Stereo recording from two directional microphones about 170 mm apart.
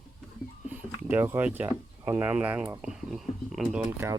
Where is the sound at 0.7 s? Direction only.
10° right (ahead or behind).